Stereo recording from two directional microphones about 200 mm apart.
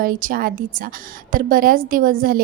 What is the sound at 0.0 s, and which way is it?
A woman's voice, 45° right (ahead or behind).